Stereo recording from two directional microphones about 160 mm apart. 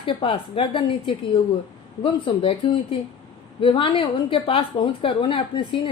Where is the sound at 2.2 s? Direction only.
35° left (ahead or behind).